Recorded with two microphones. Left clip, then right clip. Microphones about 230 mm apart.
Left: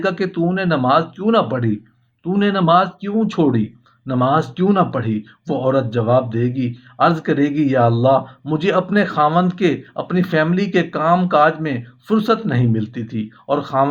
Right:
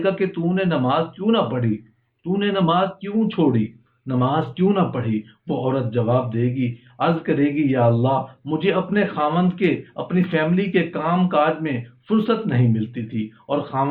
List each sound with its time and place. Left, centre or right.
0.0 s speech: left